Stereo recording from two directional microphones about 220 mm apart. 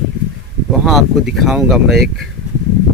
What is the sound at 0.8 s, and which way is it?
Speech, centre (ahead or behind).